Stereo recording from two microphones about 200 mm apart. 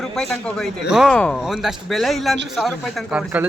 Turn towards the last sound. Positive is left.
turn(degrees=-5)  # may be behind; listen again after turning